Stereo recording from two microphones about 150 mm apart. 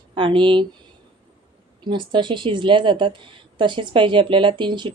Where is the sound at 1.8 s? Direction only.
30° right (ahead or behind).